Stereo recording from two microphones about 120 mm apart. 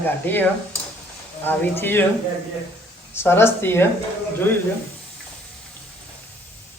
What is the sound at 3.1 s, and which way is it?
Speech, 20° left (ahead or behind).